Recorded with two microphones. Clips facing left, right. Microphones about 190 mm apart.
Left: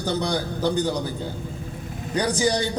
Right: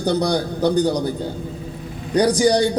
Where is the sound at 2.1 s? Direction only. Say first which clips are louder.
Right 8 dB; 35° right (ahead or behind).